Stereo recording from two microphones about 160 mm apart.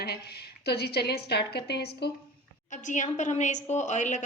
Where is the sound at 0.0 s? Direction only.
85° left.